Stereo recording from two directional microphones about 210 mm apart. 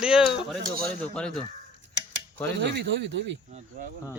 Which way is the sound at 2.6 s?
55° right (ahead or behind).